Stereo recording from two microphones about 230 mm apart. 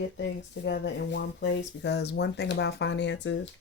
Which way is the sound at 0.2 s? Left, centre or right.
Left.